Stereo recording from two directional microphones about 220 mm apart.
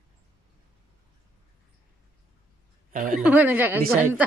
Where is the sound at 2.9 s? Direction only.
35° right (ahead or behind).